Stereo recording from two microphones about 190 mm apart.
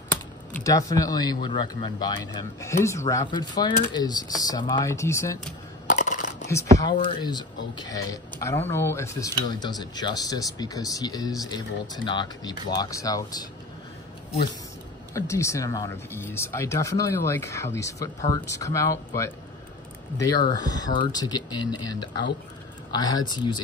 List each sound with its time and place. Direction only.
0.1 s speech: 15° left (ahead or behind)
5.9 s coin: 40° left (ahead or behind)
6.5 s speech: 20° left (ahead or behind)
15.1 s speech: 15° left (ahead or behind)
22.9 s speech: 20° left (ahead or behind)